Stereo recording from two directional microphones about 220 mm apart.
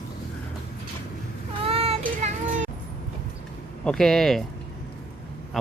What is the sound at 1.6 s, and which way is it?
Child singing, 25° right (ahead or behind).